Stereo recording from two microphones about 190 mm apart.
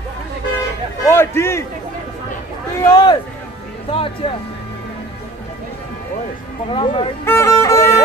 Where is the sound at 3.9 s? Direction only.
30° left (ahead or behind).